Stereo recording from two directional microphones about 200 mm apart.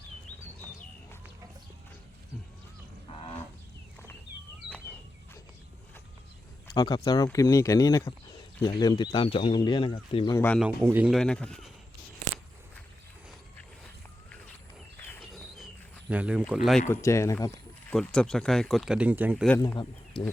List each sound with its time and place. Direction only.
6.7 s speech: 20° left (ahead or behind)
10.3 s speech: 10° left (ahead or behind)
10.6 s speech: 5° right (ahead or behind)
14.9 s a sound: 10° left (ahead or behind)
15.2 s a sound: centre (ahead or behind)
16.9 s speech: 15° left (ahead or behind)
17.9 s speech: 5° left (ahead or behind)
19.5 s speech: 15° left (ahead or behind)